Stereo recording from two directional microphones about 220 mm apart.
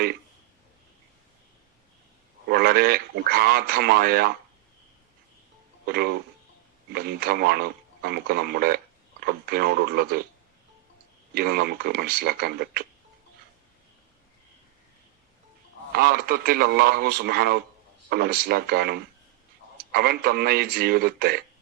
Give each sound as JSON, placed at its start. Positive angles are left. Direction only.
{"t": 2.5, "sound": "speech", "side_deg": -45}
{"t": 5.8, "sound": "speech", "side_deg": -45}
{"t": 11.3, "sound": "speech", "side_deg": -45}
{"t": 15.9, "sound": "speech", "side_deg": -45}